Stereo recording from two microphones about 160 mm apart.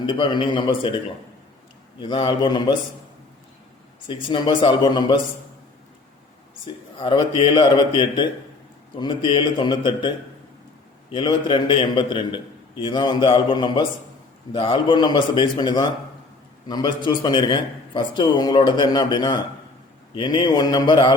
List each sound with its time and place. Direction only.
0.0 s a man's voice: 30° left (ahead or behind)
4.1 s a man's voice: 30° left (ahead or behind)
6.7 s a man's voice: 30° left (ahead or behind)
11.1 s a man's voice: 30° left (ahead or behind)